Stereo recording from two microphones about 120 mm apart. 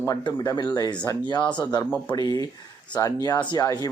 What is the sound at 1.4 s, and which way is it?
Speech, 10° left (ahead or behind).